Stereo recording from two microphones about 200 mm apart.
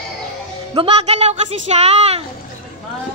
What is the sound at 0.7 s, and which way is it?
Speech, 30° right (ahead or behind).